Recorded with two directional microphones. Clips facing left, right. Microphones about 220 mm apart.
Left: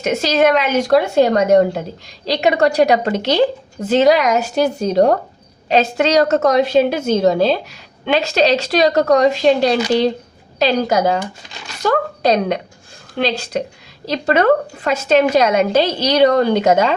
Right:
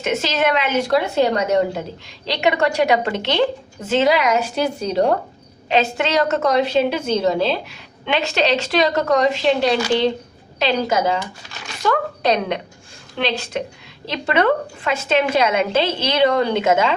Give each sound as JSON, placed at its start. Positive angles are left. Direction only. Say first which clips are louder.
{"t": 0.0, "sound": "a woman's voice", "louder": "left 5 dB", "side_deg": 40}
{"t": 2.2, "sound": "a woman's voice", "louder": "left 4 dB", "side_deg": 35}